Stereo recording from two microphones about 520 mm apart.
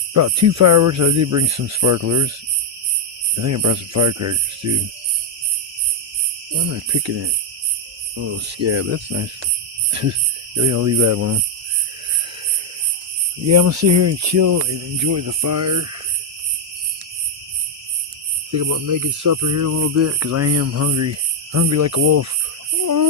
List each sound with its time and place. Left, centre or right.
0.1 s music: right
3.3 s music: right
6.7 s cricket: right
9.9 s speech: right
10.6 s music: right
13.5 s music: right
18.5 s music: right
22.8 s a sound: right